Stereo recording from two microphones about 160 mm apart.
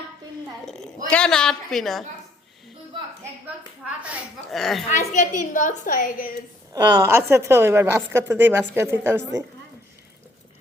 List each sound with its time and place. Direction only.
1.1 s a woman's voice: 5° left (ahead or behind)
3.4 s a woman's voice: 10° right (ahead or behind)
4.9 s a woman's voice: 50° left (ahead or behind)
6.7 s a woman's voice: 25° right (ahead or behind)